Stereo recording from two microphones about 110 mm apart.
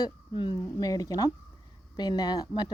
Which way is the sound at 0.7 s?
35° left (ahead or behind).